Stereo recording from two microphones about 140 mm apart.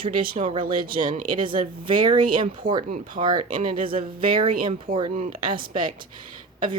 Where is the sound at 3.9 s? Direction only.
85° right.